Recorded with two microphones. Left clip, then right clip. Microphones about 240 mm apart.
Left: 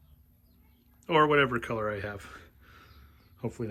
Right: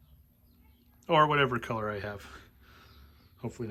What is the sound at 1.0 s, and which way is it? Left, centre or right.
Speech, centre.